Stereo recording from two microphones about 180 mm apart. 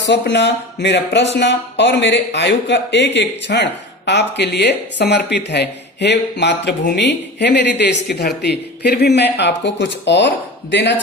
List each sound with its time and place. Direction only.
0.1 s speech: 75° left (ahead or behind)